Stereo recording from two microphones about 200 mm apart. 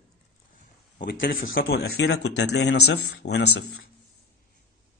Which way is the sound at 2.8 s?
55° left (ahead or behind).